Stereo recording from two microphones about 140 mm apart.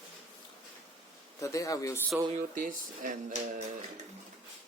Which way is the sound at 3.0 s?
65° right (ahead or behind).